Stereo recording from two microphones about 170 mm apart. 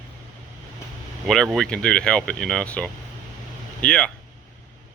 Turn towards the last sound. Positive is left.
turn(degrees=5)  # may be behind; listen again after turning